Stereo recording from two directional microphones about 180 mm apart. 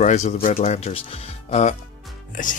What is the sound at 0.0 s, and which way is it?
Speech, 40° left (ahead or behind).